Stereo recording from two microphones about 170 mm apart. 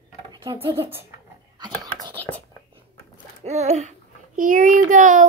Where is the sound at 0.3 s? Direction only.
25° right (ahead or behind).